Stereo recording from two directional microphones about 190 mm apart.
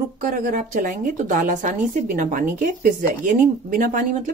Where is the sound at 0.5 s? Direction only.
45° right (ahead or behind).